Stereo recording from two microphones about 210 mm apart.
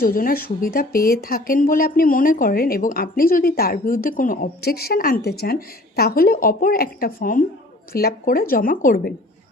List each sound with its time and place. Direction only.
0.0 s speech: 40° left (ahead or behind)